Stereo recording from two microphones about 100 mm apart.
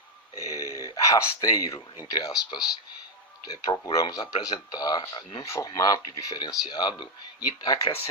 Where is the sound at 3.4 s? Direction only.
40° left (ahead or behind).